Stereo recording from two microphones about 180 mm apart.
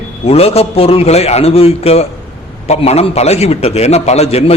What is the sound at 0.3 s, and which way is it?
A man's voice, 35° left (ahead or behind).